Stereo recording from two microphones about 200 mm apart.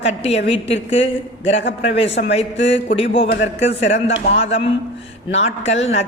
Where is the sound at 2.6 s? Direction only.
30° left (ahead or behind).